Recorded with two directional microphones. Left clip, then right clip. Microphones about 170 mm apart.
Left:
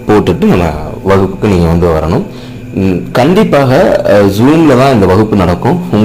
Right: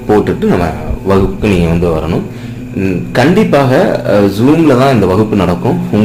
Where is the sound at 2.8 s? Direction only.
30° left (ahead or behind).